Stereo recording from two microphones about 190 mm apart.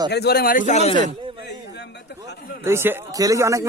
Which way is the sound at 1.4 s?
65° left (ahead or behind).